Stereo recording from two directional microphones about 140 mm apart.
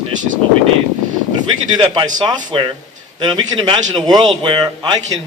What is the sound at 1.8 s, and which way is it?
A man's voice, 30° right (ahead or behind).